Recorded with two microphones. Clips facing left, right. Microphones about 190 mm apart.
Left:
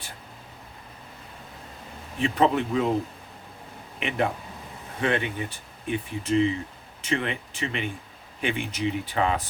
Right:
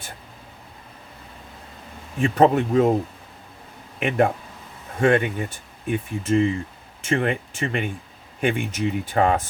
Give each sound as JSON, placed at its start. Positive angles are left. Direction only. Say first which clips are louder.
{"t": 2.1, "sound": "speech", "louder": "right 5 dB", "side_deg": -45}
{"t": 4.0, "sound": "speech", "louder": "right 6 dB", "side_deg": -50}